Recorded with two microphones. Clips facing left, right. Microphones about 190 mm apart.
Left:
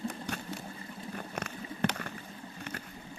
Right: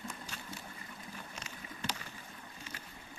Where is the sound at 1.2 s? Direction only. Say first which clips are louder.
Left 9 dB; 60° left (ahead or behind).